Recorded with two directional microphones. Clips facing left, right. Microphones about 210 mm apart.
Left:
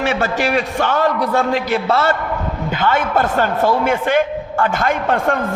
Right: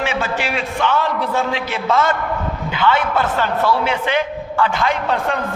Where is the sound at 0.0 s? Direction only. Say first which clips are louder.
Left 3 dB; 45° left (ahead or behind).